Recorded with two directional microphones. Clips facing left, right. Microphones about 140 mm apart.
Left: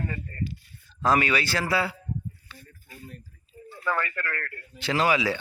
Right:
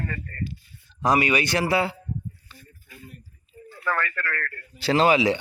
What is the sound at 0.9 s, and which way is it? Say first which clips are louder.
A man's voice: right 2 dB; 15° right (ahead or behind).